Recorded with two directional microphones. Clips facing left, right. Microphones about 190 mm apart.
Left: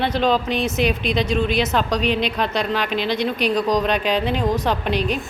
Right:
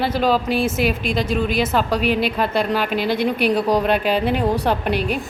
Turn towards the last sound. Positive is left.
turn(degrees=-10)  # may be behind; listen again after turning